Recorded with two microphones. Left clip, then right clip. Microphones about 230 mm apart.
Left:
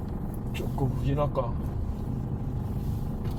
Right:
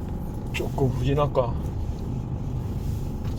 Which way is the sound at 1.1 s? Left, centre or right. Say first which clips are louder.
Right 5 dB; right.